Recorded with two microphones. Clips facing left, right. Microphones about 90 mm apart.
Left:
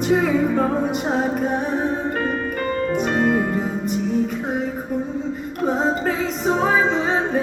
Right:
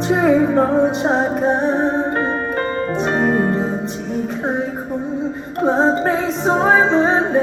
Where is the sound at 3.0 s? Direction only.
30° right (ahead or behind).